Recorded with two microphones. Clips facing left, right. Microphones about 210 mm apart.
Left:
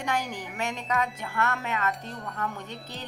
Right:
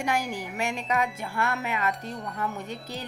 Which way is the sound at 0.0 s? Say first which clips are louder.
Right 2 dB; 10° right (ahead or behind).